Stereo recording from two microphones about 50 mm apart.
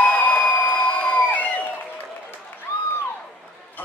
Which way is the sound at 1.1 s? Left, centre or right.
Left.